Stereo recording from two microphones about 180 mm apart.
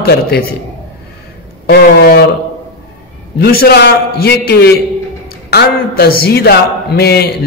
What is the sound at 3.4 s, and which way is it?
A man's voice, 60° left (ahead or behind).